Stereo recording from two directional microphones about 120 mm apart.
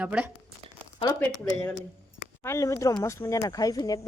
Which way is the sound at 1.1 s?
20° left (ahead or behind).